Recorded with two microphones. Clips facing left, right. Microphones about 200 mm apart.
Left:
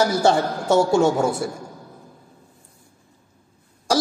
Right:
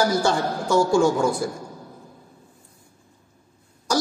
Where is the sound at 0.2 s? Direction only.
25° left (ahead or behind).